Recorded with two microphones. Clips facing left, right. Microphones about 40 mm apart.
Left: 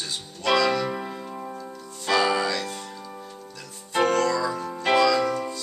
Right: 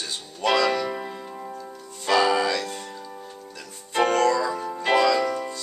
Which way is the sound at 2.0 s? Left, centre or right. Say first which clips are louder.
Right 2 dB; centre.